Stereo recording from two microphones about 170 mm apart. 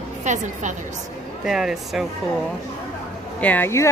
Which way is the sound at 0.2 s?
45° right (ahead or behind).